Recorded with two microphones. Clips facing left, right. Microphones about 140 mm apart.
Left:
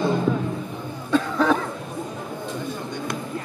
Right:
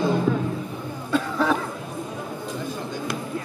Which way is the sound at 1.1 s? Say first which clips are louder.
Left 2 dB; 5° right (ahead or behind).